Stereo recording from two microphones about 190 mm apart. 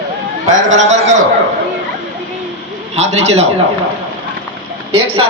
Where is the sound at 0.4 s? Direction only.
90° right.